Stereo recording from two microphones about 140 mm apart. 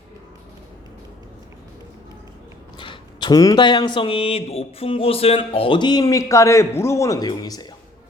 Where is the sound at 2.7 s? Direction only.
35° left (ahead or behind).